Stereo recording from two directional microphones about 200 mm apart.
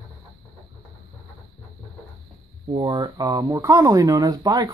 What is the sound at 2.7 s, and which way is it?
Speech, 20° right (ahead or behind).